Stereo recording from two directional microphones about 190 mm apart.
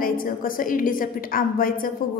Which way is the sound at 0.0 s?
45° left (ahead or behind).